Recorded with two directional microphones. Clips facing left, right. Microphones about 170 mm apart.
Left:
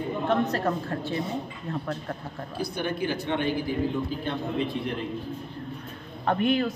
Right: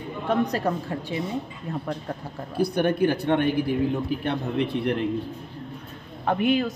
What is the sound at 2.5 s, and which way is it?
A man's voice, 60° right (ahead or behind).